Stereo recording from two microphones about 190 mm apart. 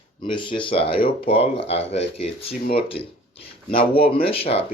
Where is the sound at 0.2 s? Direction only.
25° left (ahead or behind).